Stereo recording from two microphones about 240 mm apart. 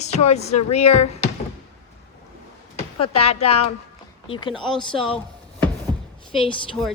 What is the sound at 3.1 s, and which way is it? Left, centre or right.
Speech, left.